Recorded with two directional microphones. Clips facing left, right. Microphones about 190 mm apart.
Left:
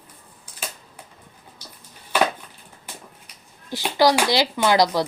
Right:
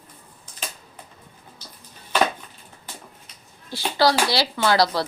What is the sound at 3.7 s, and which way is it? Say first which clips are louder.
Speech: left 2 dB; 15° left (ahead or behind).